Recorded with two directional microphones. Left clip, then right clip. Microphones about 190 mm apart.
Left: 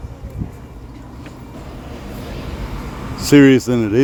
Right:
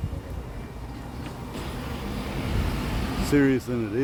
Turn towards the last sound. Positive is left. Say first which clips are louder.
# left 12 dB
turn(degrees=50)  # may be behind; listen again after turning